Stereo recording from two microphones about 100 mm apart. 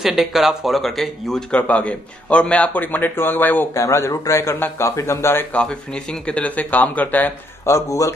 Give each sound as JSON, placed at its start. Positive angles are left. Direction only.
{"t": 0.0, "sound": "speech", "side_deg": 0}
{"t": 3.7, "sound": "speech", "side_deg": 30}
{"t": 5.5, "sound": "speech", "side_deg": 10}
{"t": 7.6, "sound": "a man's voice", "side_deg": 30}